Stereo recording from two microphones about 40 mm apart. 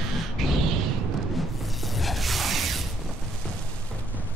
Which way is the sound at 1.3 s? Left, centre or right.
Centre.